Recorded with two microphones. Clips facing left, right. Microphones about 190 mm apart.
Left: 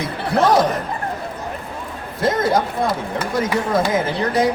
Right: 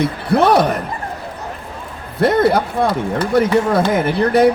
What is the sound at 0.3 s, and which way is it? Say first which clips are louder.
Chuckle: right 2 dB; 65° right (ahead or behind).